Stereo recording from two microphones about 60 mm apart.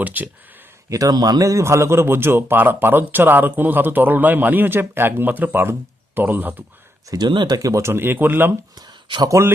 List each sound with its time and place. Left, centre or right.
0.0 s speech: right
0.9 s a man's voice: right
7.1 s speech: right
7.8 s a man's voice: right
9.4 s speech: right